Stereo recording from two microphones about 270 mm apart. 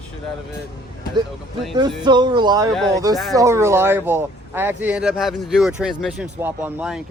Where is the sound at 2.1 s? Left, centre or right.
Centre.